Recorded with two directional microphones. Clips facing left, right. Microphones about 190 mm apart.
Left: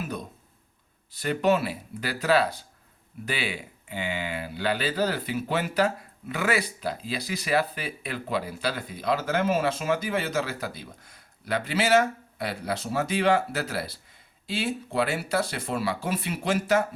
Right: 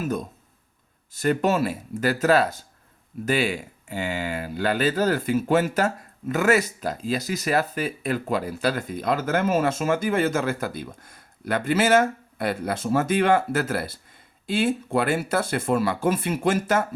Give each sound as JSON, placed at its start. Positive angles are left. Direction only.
{"t": 0.0, "sound": "speech", "side_deg": -45}